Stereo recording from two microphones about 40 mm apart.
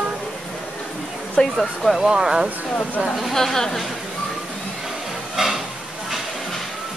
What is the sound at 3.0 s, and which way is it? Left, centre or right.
Speech, centre.